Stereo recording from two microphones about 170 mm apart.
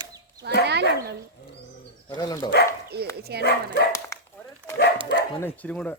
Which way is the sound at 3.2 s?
70° right (ahead or behind).